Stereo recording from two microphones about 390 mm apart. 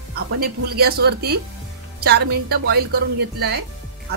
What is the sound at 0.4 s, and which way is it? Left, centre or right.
A woman's voice, right.